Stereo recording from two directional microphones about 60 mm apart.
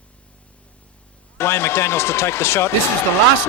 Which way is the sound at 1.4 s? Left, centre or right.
Left.